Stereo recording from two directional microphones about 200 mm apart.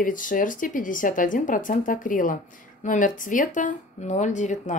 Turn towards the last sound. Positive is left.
turn(degrees=35)  # may be behind; listen again after turning